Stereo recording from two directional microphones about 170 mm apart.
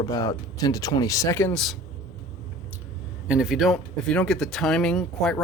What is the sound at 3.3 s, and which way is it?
Speech, 5° right (ahead or behind).